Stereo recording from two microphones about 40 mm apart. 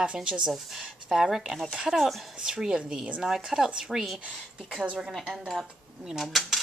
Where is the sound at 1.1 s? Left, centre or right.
Centre.